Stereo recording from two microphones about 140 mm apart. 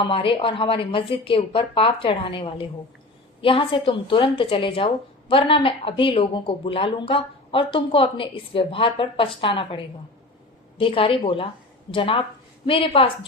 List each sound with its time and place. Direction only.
0.0 s speech: 40° left (ahead or behind)